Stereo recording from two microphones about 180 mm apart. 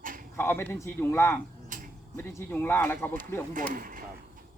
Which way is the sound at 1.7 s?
45° right (ahead or behind).